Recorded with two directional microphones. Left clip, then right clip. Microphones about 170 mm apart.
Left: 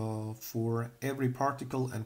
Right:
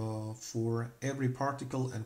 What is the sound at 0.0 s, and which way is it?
Speech, 25° left (ahead or behind).